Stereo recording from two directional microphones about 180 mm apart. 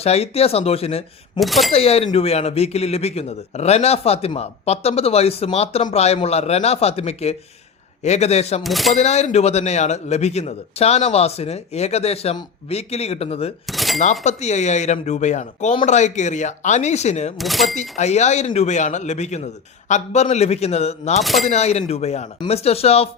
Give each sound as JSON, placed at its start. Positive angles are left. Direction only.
{"t": 0.0, "sound": "speech", "side_deg": 35}
{"t": 1.4, "sound": "speech", "side_deg": 0}
{"t": 1.7, "sound": "speech", "side_deg": 35}
{"t": 8.6, "sound": "speech", "side_deg": 0}
{"t": 9.0, "sound": "speech", "side_deg": 40}
{"t": 13.7, "sound": "a sound", "side_deg": 0}
{"t": 14.0, "sound": "speech", "side_deg": 40}
{"t": 17.3, "sound": "speech", "side_deg": 0}
{"t": 17.7, "sound": "speech", "side_deg": 40}
{"t": 21.2, "sound": "speech", "side_deg": 0}
{"t": 21.4, "sound": "speech", "side_deg": 35}